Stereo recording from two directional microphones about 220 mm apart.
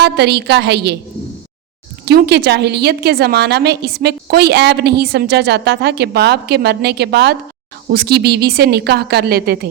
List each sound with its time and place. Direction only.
0.0 s a woman's voice: 50° right (ahead or behind)
2.0 s a woman's voice: 50° right (ahead or behind)